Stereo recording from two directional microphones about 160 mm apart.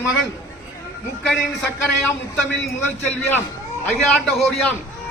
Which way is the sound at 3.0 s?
10° left (ahead or behind).